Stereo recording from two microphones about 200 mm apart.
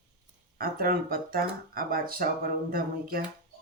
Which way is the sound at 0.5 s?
45° right (ahead or behind).